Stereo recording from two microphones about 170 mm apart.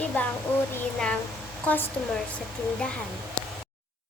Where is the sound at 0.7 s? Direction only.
10° left (ahead or behind).